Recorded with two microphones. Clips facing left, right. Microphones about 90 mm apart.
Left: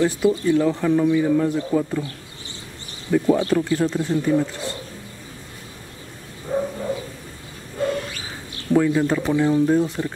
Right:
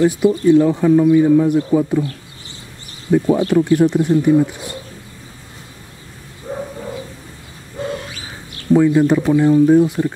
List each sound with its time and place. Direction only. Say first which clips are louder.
0.0 s speech: right 5 dB; 10° right (ahead or behind)
3.1 s speech: right 3 dB; 15° right (ahead or behind)
8.7 s speech: right 6 dB; 15° right (ahead or behind)